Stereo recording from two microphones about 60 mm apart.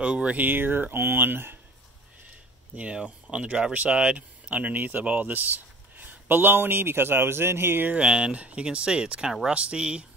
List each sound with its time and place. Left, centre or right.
0.0 s speech: centre; by 1.6 s right
2.7 s speech: right
7.9 s speech: centre